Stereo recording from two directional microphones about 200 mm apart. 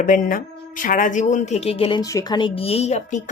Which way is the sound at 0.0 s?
40° left (ahead or behind).